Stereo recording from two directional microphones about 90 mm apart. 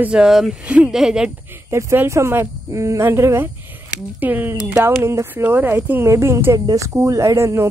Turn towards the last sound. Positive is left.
turn(degrees=-30)  # may be behind; listen again after turning